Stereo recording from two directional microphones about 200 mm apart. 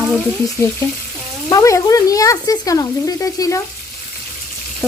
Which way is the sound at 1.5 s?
15° left (ahead or behind).